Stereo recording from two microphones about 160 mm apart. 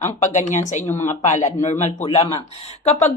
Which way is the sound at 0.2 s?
50° left (ahead or behind).